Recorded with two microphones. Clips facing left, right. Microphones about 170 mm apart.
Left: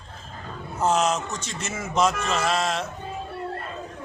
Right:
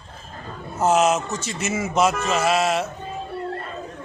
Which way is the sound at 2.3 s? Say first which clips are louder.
Right 4 dB; 5° right (ahead or behind).